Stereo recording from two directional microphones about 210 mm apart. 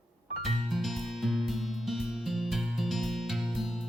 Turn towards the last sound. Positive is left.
turn(degrees=0)  # may be behind; listen again after turning